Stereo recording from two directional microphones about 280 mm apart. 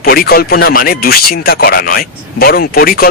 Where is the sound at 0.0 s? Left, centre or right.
Left.